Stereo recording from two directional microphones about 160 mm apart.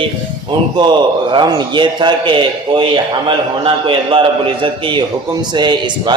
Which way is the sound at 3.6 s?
30° right (ahead or behind).